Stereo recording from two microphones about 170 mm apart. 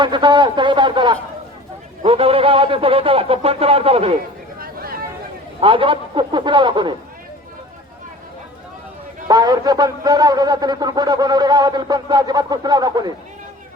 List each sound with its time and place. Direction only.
0.0 s a man's voice: 25° right (ahead or behind)
4.6 s a sound: 60° right (ahead or behind)
5.5 s a man's voice: 30° right (ahead or behind)
9.2 s a man's voice: 25° right (ahead or behind)